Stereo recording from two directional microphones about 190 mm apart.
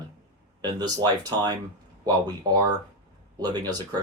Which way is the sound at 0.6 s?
20° right (ahead or behind).